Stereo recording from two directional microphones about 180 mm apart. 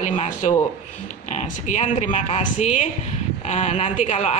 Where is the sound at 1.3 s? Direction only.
40° left (ahead or behind).